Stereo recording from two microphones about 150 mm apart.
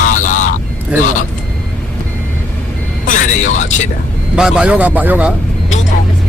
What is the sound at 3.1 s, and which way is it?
Vehicle, 60° left (ahead or behind).